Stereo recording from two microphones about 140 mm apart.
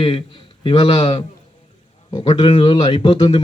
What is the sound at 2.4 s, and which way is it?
A man's voice, 35° left (ahead or behind).